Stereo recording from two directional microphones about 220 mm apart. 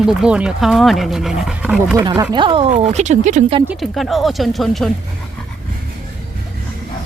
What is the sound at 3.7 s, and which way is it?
Speech, centre (ahead or behind).